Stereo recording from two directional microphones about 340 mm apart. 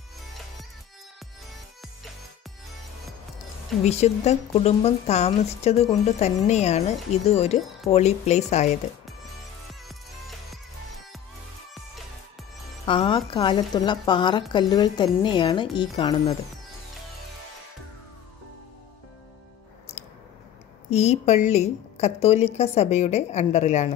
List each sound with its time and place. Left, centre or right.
3.8 s a woman's voice: centre
12.8 s speech: centre
20.0 s a sound: centre
20.9 s a woman's voice: centre